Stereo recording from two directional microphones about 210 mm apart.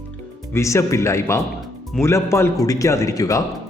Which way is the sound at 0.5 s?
15° left (ahead or behind).